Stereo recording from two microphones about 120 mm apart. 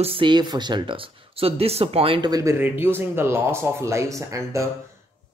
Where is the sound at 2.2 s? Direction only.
30° right (ahead or behind).